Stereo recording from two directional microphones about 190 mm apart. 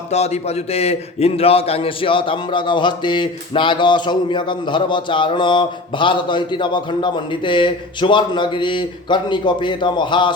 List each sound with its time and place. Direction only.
0.7 s speech: 35° left (ahead or behind)